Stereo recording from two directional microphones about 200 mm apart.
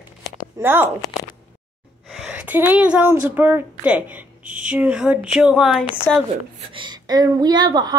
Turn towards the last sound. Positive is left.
turn(degrees=-20)  # may be behind; listen again after turning